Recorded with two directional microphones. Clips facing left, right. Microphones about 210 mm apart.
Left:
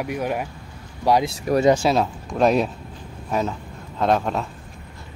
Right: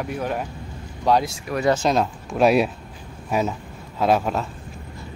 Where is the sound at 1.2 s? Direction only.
35° left (ahead or behind).